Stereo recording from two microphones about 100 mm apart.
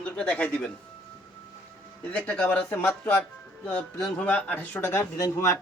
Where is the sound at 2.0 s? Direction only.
10° left (ahead or behind).